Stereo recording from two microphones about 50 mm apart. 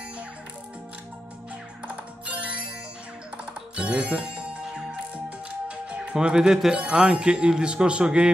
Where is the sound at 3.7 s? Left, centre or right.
Right.